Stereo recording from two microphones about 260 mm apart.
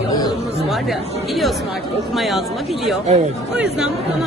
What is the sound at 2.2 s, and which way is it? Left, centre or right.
Speech, centre.